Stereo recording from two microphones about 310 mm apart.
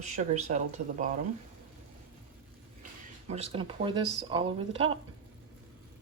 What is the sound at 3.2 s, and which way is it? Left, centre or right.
Speech, centre.